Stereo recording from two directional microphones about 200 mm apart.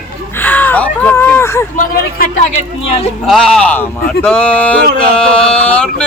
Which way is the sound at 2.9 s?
30° left (ahead or behind).